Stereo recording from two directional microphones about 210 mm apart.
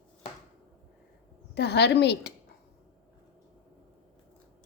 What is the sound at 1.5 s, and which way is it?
Speech, 55° left (ahead or behind).